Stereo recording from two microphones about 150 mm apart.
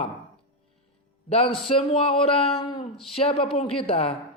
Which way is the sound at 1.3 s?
40° left (ahead or behind).